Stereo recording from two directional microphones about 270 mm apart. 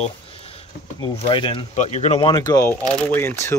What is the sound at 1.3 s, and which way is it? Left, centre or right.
Speech, centre.